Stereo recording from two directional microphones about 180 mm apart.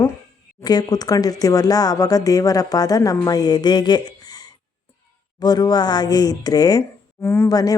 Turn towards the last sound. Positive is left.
turn(degrees=20)  # may be behind; listen again after turning